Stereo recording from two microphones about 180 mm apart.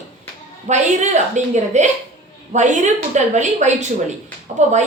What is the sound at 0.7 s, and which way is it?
A woman's voice, 40° right (ahead or behind).